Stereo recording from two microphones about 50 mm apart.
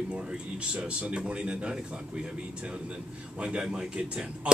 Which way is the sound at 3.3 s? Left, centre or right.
Right.